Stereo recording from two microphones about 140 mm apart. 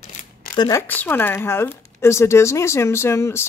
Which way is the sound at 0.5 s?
25° left (ahead or behind).